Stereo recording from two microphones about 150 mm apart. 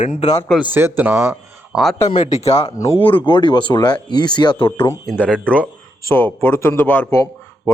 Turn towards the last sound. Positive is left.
turn(degrees=15)  # may be behind; listen again after turning